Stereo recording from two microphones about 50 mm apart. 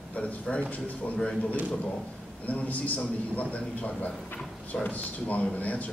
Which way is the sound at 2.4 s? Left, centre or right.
Left.